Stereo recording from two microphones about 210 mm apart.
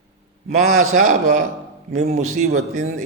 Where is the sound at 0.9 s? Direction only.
35° right (ahead or behind).